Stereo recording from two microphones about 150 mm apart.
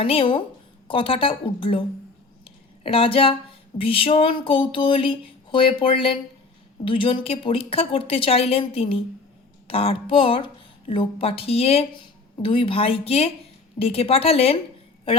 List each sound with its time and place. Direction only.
0.0 s speech: 35° left (ahead or behind)
2.8 s speech: 40° left (ahead or behind)